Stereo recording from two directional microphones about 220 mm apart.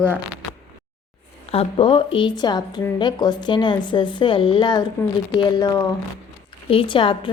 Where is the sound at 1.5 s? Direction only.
25° left (ahead or behind).